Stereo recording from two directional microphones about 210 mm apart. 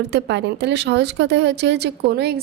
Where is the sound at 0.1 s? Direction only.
55° right (ahead or behind).